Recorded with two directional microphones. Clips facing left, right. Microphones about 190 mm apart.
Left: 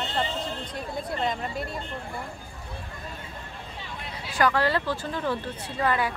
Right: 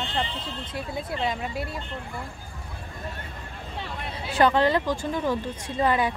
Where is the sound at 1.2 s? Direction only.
5° right (ahead or behind).